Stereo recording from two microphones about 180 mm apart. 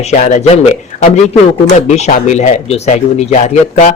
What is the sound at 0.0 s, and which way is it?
A man's voice, 40° left (ahead or behind).